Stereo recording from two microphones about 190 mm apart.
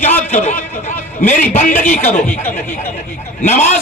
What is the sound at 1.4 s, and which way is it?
Speech, 10° left (ahead or behind).